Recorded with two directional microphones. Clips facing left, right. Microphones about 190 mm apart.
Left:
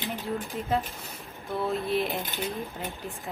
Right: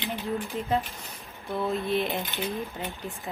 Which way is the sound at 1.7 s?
Centre (ahead or behind).